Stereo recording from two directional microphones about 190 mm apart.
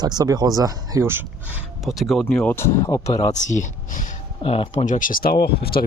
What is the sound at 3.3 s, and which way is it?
Speech, 40° left (ahead or behind).